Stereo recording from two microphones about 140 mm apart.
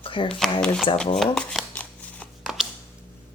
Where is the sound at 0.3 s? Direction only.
Centre (ahead or behind).